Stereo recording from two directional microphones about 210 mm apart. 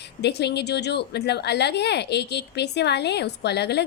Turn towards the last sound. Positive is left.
turn(degrees=50)  # may be behind; listen again after turning